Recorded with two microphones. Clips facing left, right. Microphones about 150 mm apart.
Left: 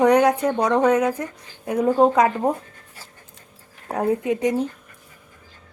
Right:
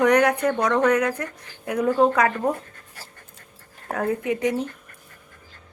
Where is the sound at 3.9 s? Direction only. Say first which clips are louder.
Left 3 dB; 15° left (ahead or behind).